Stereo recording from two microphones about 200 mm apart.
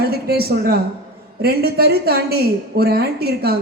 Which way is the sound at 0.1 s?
50° right (ahead or behind).